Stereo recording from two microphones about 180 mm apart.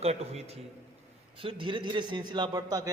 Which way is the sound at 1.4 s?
30° right (ahead or behind).